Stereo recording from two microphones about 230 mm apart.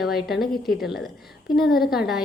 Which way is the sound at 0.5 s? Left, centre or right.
Left.